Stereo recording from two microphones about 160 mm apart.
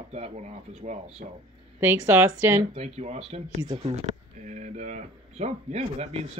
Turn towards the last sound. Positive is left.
turn(degrees=-40)  # may be behind; listen again after turning